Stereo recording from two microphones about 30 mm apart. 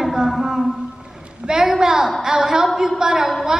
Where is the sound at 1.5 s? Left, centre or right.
Centre.